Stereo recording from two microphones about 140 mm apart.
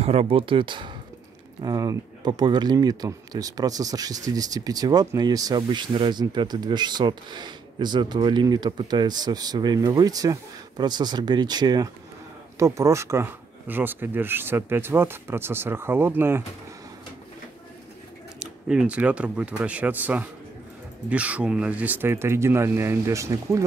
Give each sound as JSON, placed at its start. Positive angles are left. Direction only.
{"t": 0.0, "sound": "speech", "side_deg": -45}
{"t": 18.4, "sound": "speech", "side_deg": -5}